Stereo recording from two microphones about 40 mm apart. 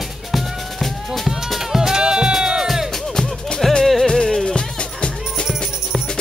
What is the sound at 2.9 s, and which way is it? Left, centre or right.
Music, centre.